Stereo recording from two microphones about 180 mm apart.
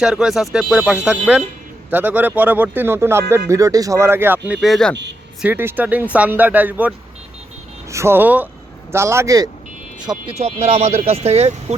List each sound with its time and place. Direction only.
0.0 s speech: 5° right (ahead or behind)
5.4 s speech: 10° right (ahead or behind)
10.3 s speech: 35° right (ahead or behind)